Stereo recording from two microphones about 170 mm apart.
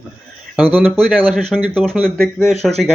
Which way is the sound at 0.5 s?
10° right (ahead or behind).